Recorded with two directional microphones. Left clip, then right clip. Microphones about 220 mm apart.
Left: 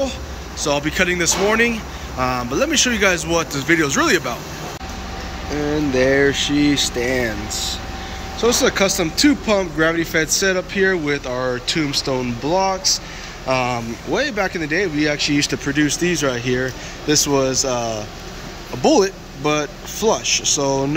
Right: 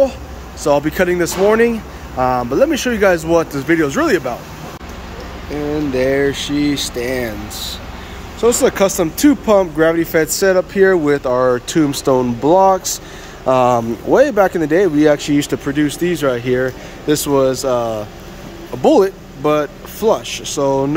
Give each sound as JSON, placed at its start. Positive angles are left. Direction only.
{"t": 0.7, "sound": "speech", "side_deg": -20}
{"t": 5.9, "sound": "speech", "side_deg": -5}